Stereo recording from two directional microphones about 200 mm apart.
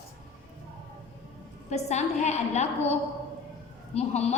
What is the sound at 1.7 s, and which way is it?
A woman's voice, 35° left (ahead or behind).